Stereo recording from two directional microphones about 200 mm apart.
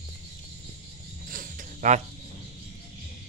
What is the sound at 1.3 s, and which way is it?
Pulleys, 45° right (ahead or behind).